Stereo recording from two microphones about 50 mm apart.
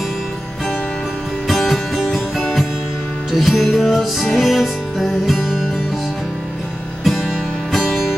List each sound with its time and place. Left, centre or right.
1.5 s music: centre
7.1 s music: centre